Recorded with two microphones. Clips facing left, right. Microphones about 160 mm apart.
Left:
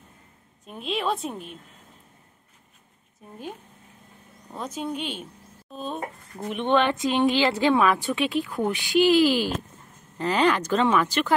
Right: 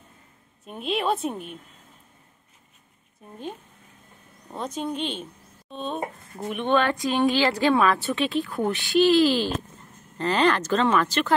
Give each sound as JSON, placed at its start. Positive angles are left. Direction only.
{"t": 0.7, "sound": "a woman's voice", "side_deg": 0}
{"t": 4.6, "sound": "a woman's voice", "side_deg": 5}
{"t": 6.5, "sound": "speech", "side_deg": 20}